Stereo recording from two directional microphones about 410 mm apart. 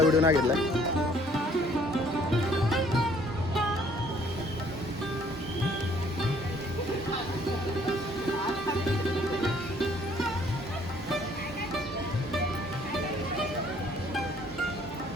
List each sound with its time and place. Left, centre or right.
0.0 s speech: centre
2.6 s music: centre